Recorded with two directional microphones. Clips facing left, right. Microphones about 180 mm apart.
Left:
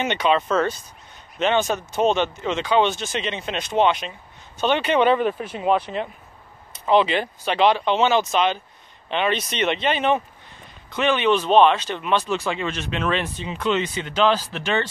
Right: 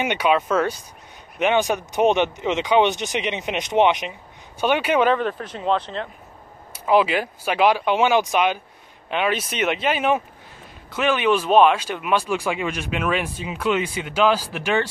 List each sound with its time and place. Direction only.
0.0 s speech: 10° right (ahead or behind)
5.1 s speech: 10° left (ahead or behind)
6.7 s speech: 5° right (ahead or behind)